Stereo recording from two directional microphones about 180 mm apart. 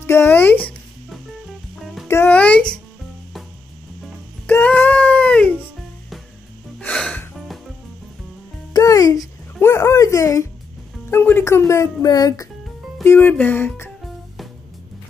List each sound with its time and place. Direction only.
0.0 s music: 15° left (ahead or behind)
4.5 s music: 10° left (ahead or behind)
6.8 s music: 5° left (ahead or behind)
8.7 s a sound: 20° left (ahead or behind)
11.1 s music: 15° left (ahead or behind)